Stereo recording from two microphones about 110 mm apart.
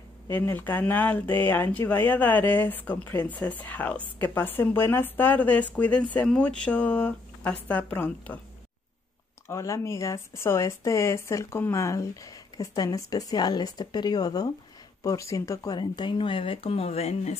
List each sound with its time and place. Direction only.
0.3 s speech: 20° left (ahead or behind)
9.5 s speech: 25° left (ahead or behind); by 17.4 s 80° left